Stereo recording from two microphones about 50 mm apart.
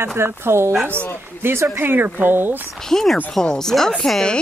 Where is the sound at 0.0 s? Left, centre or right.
Right.